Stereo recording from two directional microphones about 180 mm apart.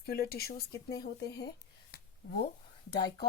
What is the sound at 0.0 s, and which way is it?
Speech, 60° left (ahead or behind).